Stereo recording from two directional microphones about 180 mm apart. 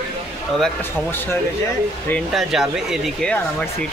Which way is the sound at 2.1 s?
Centre (ahead or behind).